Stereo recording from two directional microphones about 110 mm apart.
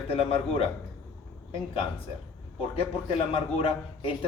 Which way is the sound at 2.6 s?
60° left (ahead or behind).